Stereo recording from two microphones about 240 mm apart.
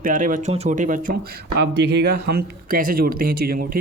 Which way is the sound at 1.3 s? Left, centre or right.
Right.